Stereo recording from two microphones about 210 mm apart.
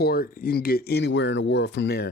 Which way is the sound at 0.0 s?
45° left (ahead or behind).